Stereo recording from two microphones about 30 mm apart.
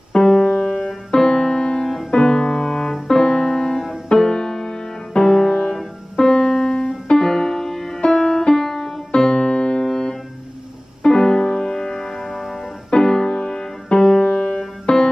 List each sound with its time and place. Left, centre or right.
0.1 s music: centre
3.1 s keyboard: centre
4.1 s music: left
9.2 s music: left
11.0 s music: centre